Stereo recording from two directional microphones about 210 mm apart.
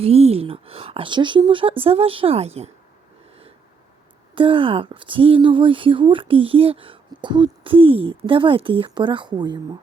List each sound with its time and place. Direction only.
0.0 s speech: 30° right (ahead or behind)
4.4 s speech: 25° right (ahead or behind)